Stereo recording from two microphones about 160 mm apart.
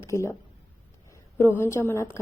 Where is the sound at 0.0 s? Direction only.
15° left (ahead or behind).